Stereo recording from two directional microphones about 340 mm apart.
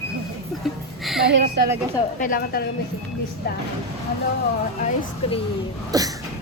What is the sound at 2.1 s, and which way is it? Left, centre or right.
Speech, left.